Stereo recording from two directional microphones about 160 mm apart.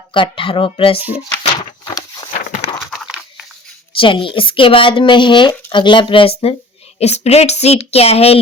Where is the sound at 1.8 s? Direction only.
25° left (ahead or behind).